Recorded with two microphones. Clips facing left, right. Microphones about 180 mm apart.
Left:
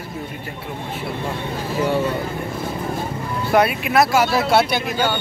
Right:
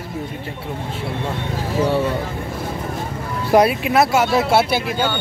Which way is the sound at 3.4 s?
30° right (ahead or behind).